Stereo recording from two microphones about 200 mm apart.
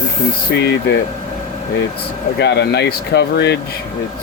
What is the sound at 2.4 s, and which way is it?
Speech, 55° left (ahead or behind).